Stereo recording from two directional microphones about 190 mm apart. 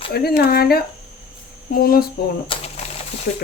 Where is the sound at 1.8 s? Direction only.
50° left (ahead or behind).